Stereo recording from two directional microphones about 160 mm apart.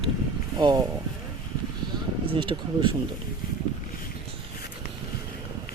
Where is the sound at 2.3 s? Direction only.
30° right (ahead or behind).